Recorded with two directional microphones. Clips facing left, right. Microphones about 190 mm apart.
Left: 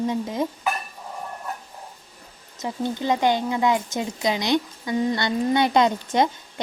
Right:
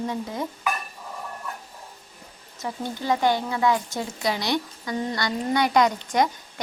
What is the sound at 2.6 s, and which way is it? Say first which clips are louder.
Speech: left 4 dB; 20° left (ahead or behind).